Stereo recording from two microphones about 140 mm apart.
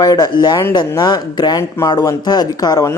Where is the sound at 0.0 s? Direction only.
30° left (ahead or behind).